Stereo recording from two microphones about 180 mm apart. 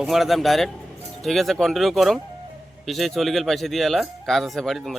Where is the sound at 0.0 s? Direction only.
Centre (ahead or behind).